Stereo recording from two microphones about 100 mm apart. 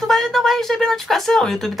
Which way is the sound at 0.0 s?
5° left (ahead or behind).